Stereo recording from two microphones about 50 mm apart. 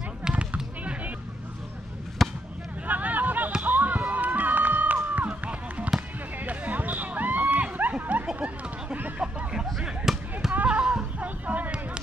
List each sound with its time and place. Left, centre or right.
0.3 s basketball bounce: right
2.2 s basketball bounce: centre
2.9 s a sound: right
3.6 s basketball bounce: right
4.0 s run: right
6.4 s a sound: right
9.8 s basketball bounce: centre
10.5 s a sound: right
11.1 s music: right